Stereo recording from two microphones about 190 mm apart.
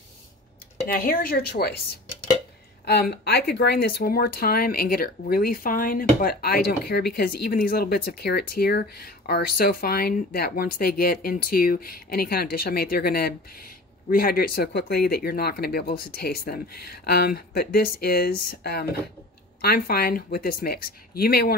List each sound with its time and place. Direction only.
0.9 s speech: 50° left (ahead or behind)
2.8 s speech: 60° left (ahead or behind)